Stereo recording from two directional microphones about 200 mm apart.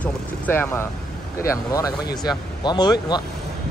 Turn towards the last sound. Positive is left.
turn(degrees=20)  # may be behind; listen again after turning